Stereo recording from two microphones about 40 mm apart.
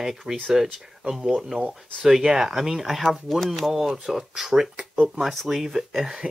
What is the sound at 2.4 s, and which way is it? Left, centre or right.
Speech, centre.